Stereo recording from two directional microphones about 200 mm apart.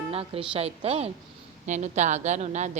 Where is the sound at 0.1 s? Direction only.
30° right (ahead or behind).